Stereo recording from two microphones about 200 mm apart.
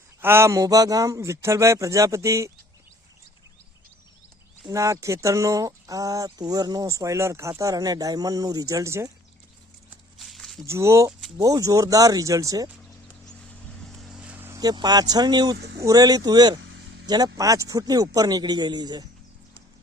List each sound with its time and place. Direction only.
0.2 s speech: 10° right (ahead or behind)
4.6 s speech: 15° right (ahead or behind)
10.2 s a sound: centre (ahead or behind)
10.7 s speech: 15° right (ahead or behind)
14.0 s a sound: 5° right (ahead or behind); by 15.5 s 20° right (ahead or behind)
15.5 s speech: 55° right (ahead or behind)
15.8 s a man's voice: 20° right (ahead or behind)
16.6 s a sound: 70° right (ahead or behind)
17.1 s a man's voice: 20° right (ahead or behind)